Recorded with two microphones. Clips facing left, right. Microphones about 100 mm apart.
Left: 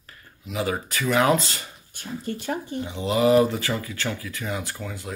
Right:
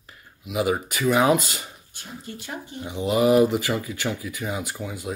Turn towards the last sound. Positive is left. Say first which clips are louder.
# right 2 dB
turn(degrees=-15)  # may be behind; listen again after turning